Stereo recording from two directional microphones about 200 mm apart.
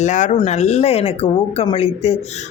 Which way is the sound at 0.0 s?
35° left (ahead or behind).